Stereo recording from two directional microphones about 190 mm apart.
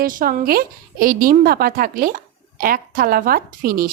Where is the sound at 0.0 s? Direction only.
45° right (ahead or behind).